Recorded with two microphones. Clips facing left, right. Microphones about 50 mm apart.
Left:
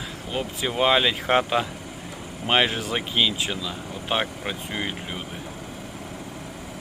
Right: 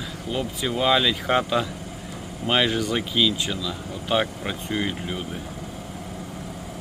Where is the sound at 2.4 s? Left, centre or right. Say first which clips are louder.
Even; left.